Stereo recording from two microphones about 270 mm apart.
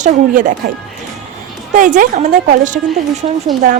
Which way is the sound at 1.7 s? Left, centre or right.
Right.